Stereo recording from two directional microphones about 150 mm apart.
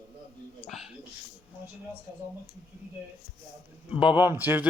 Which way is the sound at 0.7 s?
Centre (ahead or behind).